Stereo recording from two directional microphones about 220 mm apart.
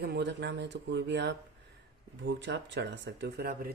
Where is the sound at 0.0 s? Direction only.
50° right (ahead or behind).